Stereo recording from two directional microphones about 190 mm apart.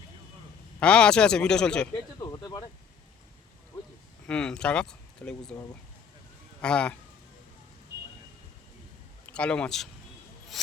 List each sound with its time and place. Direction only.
0.8 s speech: 5° left (ahead or behind)
2.1 s a sound: 20° left (ahead or behind)
4.3 s speech: 5° left (ahead or behind)
6.6 s speech: 5° left (ahead or behind)
9.2 s a man's voice: 5° left (ahead or behind)